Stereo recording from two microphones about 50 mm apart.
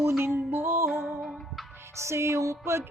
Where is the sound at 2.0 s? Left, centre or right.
Right.